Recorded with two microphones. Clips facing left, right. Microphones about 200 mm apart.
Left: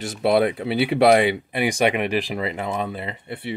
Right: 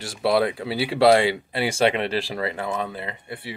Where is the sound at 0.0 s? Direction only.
20° left (ahead or behind).